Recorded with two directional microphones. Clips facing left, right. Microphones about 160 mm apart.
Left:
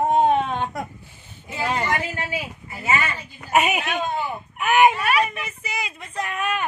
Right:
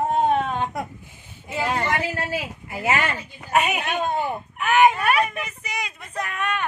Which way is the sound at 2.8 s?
75° right (ahead or behind).